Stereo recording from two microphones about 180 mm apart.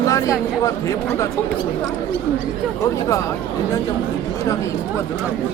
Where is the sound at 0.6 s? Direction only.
20° left (ahead or behind).